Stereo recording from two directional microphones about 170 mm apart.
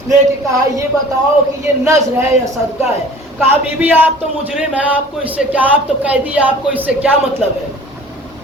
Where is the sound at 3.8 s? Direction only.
10° right (ahead or behind).